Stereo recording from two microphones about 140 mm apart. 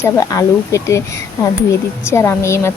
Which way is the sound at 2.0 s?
20° left (ahead or behind).